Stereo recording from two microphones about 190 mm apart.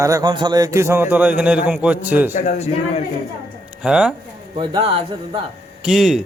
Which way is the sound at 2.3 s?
40° left (ahead or behind).